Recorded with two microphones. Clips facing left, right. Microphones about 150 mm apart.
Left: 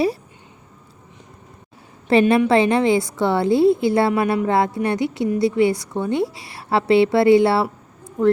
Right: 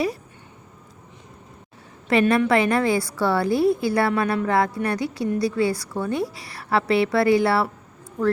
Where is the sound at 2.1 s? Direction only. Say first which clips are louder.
Left 3 dB; 30° left (ahead or behind).